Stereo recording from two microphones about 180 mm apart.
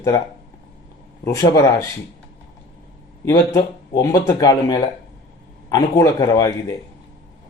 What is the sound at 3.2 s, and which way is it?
Speech, 15° left (ahead or behind).